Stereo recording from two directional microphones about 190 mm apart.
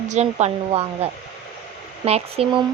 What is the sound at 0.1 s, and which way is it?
Speech, 35° right (ahead or behind).